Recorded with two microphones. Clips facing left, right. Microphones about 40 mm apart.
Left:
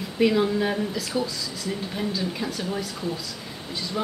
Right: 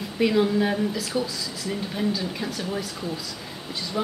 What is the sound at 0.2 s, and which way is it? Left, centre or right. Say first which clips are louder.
Speech: even; centre.